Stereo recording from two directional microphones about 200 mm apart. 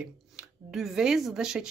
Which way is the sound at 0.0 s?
5° right (ahead or behind).